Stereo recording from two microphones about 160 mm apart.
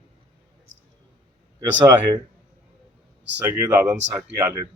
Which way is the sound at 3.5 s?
15° right (ahead or behind).